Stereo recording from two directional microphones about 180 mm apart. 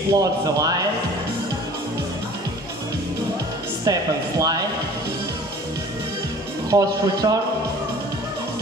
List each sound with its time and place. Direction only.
0.1 s speech: 20° right (ahead or behind)
3.8 s speech: 20° right (ahead or behind)
6.7 s speech: 20° right (ahead or behind)